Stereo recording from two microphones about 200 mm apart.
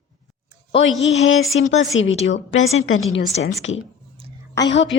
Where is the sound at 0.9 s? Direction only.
65° left (ahead or behind).